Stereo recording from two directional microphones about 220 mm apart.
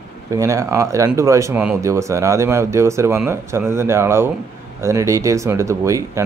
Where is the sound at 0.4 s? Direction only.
15° right (ahead or behind).